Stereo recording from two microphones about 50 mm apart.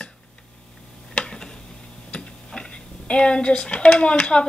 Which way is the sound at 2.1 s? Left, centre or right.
Centre.